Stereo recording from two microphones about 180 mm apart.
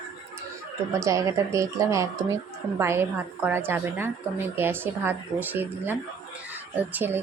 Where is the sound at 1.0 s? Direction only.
15° right (ahead or behind).